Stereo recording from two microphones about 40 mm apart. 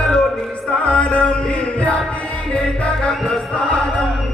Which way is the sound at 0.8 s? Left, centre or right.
Left.